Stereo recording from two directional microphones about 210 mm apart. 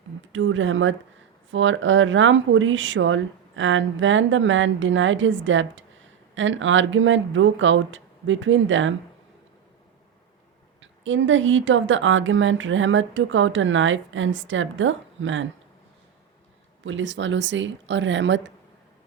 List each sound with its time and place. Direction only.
0.3 s speech: 65° right (ahead or behind)
10.8 s speech: 65° right (ahead or behind)
16.8 s speech: 60° right (ahead or behind)